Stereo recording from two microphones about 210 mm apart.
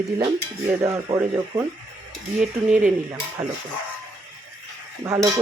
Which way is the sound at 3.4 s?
10° right (ahead or behind).